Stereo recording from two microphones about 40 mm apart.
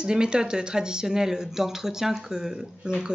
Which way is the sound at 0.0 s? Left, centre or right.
Right.